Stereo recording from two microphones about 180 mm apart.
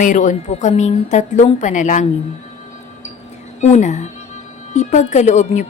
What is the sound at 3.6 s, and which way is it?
A woman's voice, 40° left (ahead or behind).